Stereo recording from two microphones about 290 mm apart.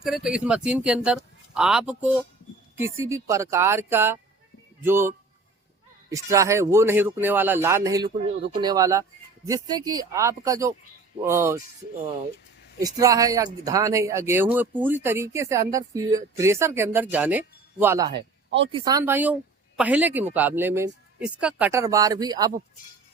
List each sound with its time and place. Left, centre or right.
0.0 s speech: centre
12.8 s speech: centre